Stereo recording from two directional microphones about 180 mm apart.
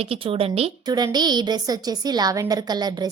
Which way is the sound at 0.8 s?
20° right (ahead or behind).